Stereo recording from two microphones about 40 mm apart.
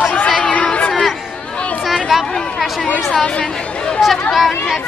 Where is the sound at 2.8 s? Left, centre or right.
Left.